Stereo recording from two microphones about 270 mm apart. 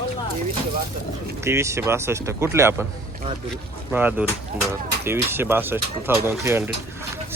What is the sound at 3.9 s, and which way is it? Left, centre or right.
Speech, centre.